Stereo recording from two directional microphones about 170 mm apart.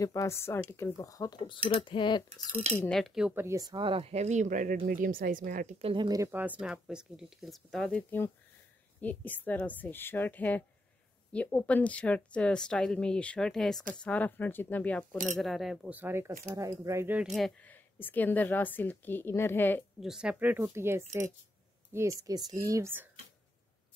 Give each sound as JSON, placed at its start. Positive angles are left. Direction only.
{"t": 0.0, "sound": "a woman's voice", "side_deg": 20}
{"t": 2.7, "sound": "speech", "side_deg": 5}
{"t": 3.4, "sound": "speech", "side_deg": -20}
{"t": 5.8, "sound": "speech", "side_deg": -35}
{"t": 6.0, "sound": "a woman's voice", "side_deg": -20}
{"t": 20.0, "sound": "speech", "side_deg": -5}